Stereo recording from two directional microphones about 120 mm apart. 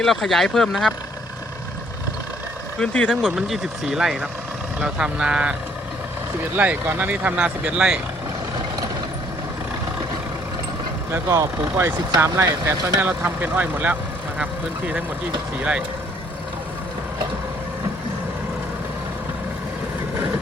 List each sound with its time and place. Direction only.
0.0 s speech: centre (ahead or behind)
2.7 s speech: 10° left (ahead or behind); by 5.5 s 10° right (ahead or behind)
6.6 s speech: 15° right (ahead or behind)
11.1 s speech: 25° right (ahead or behind)
13.0 s speech: 15° right (ahead or behind)